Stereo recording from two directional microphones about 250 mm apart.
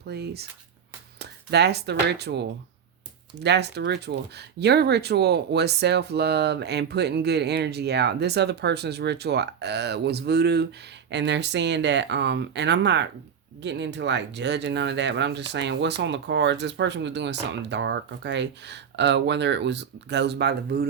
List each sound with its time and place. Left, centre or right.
0.1 s speech: right